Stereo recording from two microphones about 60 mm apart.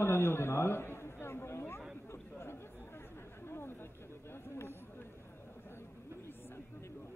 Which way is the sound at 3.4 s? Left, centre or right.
Left.